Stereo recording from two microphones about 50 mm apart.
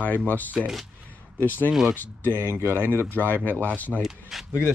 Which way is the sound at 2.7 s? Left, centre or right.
Left.